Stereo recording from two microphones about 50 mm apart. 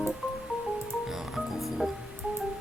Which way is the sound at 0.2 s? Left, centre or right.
Centre.